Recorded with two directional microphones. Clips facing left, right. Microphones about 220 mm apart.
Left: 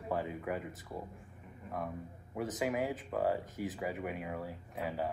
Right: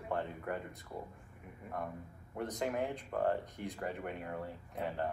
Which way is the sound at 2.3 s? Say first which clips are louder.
Left 2 dB; 5° left (ahead or behind).